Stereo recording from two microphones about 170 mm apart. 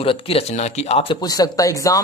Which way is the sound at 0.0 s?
30° left (ahead or behind).